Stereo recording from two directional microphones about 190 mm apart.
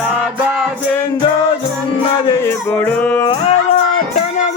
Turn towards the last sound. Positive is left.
turn(degrees=35)  # may be behind; listen again after turning